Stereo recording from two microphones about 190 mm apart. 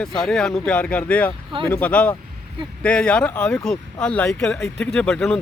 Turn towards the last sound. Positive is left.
turn(degrees=5)  # may be behind; listen again after turning